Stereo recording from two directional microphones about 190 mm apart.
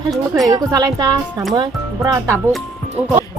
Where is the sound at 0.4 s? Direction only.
20° right (ahead or behind).